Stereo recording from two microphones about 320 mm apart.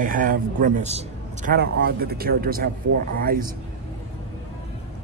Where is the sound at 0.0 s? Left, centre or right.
Right.